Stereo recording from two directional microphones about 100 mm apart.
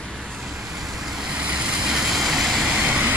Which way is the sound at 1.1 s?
5° right (ahead or behind).